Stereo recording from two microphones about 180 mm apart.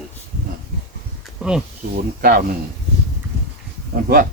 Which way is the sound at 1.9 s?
55° right (ahead or behind).